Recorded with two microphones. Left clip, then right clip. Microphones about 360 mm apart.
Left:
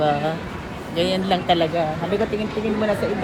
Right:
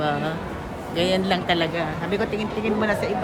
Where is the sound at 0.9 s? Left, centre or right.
Centre.